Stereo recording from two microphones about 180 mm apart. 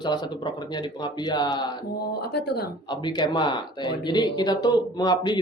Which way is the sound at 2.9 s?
25° left (ahead or behind).